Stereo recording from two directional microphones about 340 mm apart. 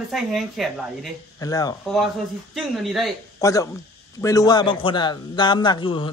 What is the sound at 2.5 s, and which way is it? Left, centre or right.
A man's voice, centre.